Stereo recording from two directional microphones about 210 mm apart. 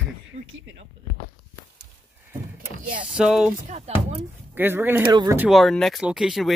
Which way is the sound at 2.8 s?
40° right (ahead or behind).